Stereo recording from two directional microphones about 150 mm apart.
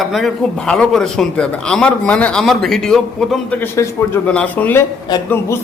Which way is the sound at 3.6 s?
15° left (ahead or behind).